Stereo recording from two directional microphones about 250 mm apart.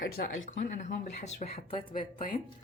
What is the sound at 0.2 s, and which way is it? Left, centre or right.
A woman's voice, left.